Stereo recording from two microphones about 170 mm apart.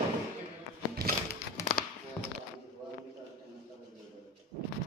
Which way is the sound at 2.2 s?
15° left (ahead or behind).